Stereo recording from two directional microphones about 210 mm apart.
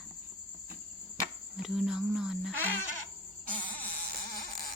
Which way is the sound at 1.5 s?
Centre (ahead or behind).